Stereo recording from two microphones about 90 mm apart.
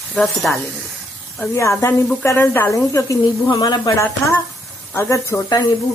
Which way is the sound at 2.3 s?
25° left (ahead or behind).